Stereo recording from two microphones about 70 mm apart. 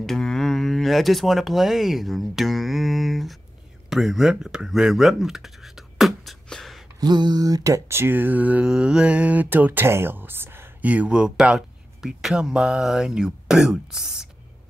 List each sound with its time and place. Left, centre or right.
0.0 s a sound: centre
3.9 s speech: centre
7.0 s speech: right
7.9 s speech: right
8.6 s speech: centre; by 10.7 s right
10.8 s speech: right